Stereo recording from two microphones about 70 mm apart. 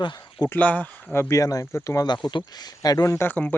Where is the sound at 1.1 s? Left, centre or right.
Left.